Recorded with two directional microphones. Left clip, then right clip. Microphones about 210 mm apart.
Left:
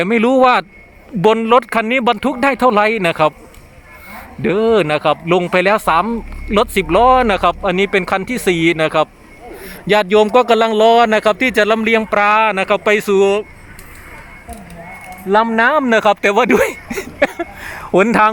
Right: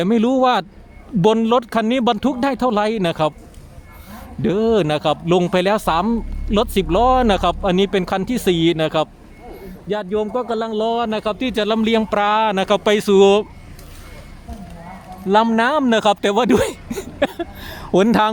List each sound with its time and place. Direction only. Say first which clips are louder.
0.0 s speech: left 5 dB; centre (ahead or behind)
4.4 s speech: left 4 dB; 5° right (ahead or behind)
9.8 s speech: left 10 dB; 20° left (ahead or behind); by 13.3 s 10° right (ahead or behind)
15.3 s speech: left 3 dB; 5° right (ahead or behind)